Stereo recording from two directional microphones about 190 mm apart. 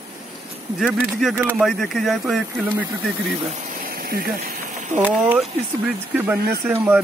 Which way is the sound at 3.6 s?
50° right (ahead or behind).